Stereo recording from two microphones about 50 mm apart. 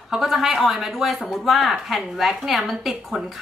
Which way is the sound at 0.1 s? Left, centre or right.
Centre.